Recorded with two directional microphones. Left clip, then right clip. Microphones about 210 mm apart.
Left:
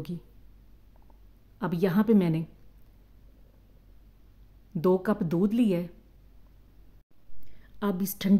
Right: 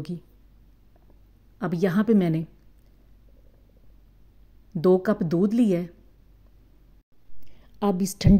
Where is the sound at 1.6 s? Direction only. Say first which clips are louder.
Right 2 dB; 10° right (ahead or behind).